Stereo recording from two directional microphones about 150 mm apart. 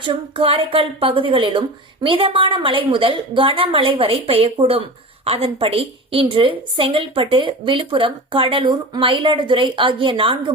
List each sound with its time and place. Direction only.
0.0 s a woman's voice: 35° right (ahead or behind)